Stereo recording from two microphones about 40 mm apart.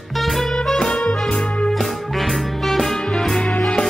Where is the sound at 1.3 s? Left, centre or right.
Left.